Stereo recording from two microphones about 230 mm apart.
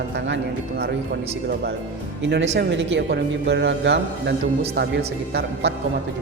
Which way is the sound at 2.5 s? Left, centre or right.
Right.